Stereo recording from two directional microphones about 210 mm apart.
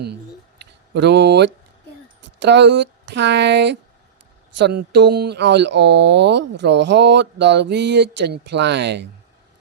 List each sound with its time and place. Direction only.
0.6 s speech: 55° right (ahead or behind)